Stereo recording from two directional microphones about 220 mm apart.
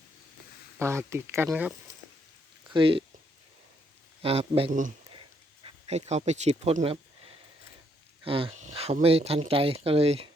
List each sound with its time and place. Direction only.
0.8 s speech: 10° right (ahead or behind)
2.6 s speech: 25° right (ahead or behind)
4.2 s speech: 25° right (ahead or behind)